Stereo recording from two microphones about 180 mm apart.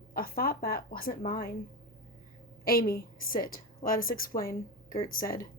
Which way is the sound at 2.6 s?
55° left (ahead or behind).